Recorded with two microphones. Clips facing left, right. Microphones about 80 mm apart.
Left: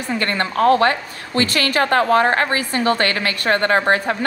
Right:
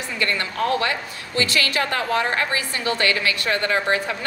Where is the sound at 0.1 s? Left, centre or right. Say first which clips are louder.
Left 5 dB; left.